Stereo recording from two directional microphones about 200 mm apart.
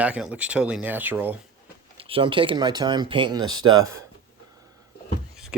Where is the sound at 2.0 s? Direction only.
25° right (ahead or behind).